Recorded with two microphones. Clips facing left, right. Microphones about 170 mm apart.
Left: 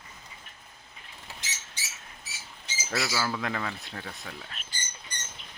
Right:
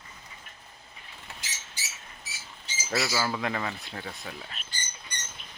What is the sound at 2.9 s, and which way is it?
Speech, 10° right (ahead or behind).